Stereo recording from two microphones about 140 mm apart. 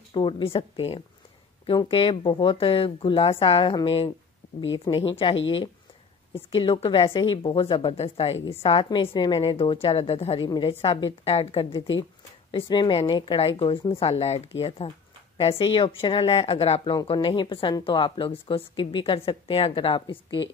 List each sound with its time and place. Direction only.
0.1 s a woman's voice: 40° left (ahead or behind)
17.1 s a woman's voice: 35° left (ahead or behind)